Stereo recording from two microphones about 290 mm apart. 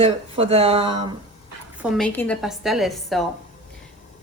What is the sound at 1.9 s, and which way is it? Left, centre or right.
A woman's voice, centre.